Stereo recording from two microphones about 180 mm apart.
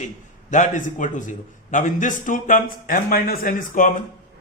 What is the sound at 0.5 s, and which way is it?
A man's voice, 45° left (ahead or behind).